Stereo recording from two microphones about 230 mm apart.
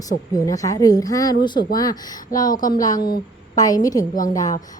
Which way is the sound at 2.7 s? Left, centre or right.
Centre.